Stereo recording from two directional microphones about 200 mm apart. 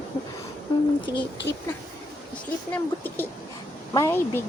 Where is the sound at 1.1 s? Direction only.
15° right (ahead or behind).